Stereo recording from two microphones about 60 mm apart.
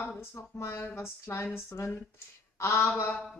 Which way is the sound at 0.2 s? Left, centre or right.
Left.